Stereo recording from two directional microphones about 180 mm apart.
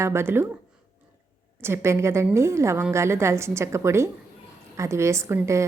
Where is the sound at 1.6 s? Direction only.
15° right (ahead or behind).